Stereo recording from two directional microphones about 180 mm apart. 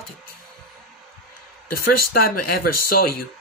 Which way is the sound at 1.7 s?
55° left (ahead or behind).